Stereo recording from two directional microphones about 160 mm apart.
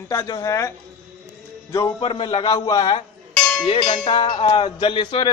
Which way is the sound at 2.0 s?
30° left (ahead or behind).